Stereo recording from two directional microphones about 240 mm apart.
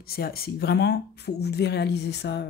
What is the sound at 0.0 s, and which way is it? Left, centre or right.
Speech, left.